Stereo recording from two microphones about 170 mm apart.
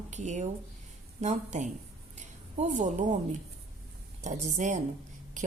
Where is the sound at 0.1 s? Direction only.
45° right (ahead or behind).